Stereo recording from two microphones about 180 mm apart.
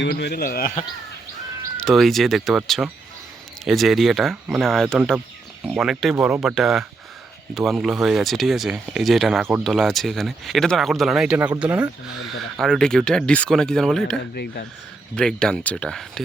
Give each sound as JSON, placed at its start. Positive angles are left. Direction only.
{"t": 0.0, "sound": "speech", "side_deg": 65}
{"t": 1.8, "sound": "speech", "side_deg": 0}
{"t": 14.3, "sound": "speech", "side_deg": 60}
{"t": 15.1, "sound": "speech", "side_deg": 5}